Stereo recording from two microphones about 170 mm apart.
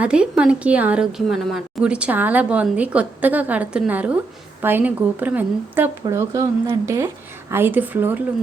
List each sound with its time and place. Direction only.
0.0 s a woman's voice: 5° right (ahead or behind)